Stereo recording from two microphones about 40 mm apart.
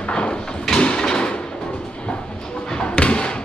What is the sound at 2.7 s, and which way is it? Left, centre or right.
Basketball bounce, left.